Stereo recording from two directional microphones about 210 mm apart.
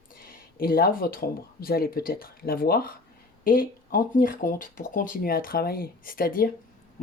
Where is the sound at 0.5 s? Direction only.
45° left (ahead or behind).